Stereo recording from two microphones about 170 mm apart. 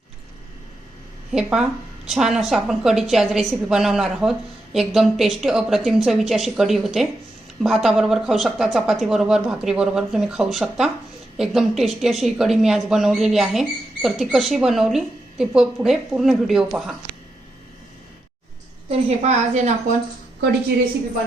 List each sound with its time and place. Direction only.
1.3 s speech: 5° right (ahead or behind)
18.9 s a woman's voice: 40° right (ahead or behind)